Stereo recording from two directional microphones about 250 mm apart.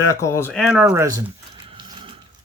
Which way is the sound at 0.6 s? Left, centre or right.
Centre.